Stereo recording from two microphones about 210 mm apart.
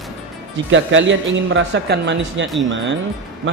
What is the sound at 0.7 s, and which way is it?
A man's voice, 65° right (ahead or behind).